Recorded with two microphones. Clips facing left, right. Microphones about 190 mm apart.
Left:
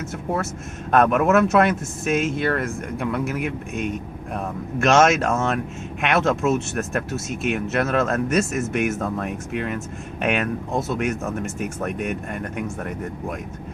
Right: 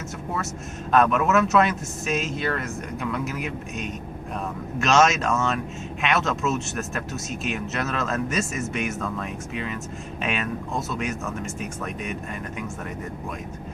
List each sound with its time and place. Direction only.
0.9 s speech: 55° left (ahead or behind)